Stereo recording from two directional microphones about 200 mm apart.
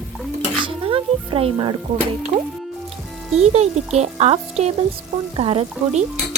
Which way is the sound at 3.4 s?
35° right (ahead or behind).